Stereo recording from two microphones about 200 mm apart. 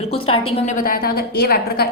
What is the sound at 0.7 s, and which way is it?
A woman's voice, 45° left (ahead or behind).